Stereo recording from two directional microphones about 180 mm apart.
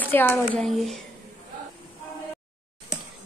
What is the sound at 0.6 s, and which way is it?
Speech, centre (ahead or behind).